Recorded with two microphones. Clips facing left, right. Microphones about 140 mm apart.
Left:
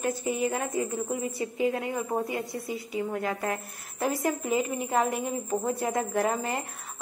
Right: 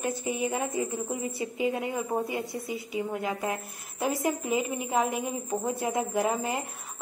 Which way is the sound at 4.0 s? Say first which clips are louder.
Even; centre (ahead or behind).